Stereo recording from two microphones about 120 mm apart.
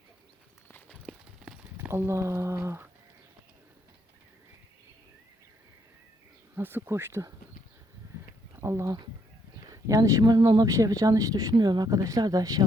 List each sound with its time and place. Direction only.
1.8 s speech: 20° right (ahead or behind)
6.6 s speech: 15° right (ahead or behind)
8.5 s speech: 25° right (ahead or behind)